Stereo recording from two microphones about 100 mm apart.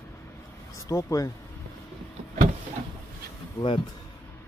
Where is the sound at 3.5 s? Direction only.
55° left (ahead or behind).